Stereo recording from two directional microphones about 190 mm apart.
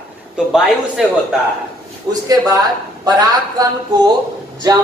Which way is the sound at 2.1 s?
20° right (ahead or behind).